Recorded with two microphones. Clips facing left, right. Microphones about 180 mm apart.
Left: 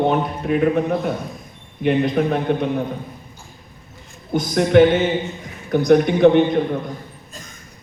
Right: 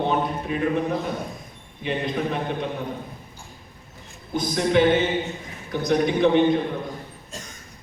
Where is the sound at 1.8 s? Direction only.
55° left (ahead or behind).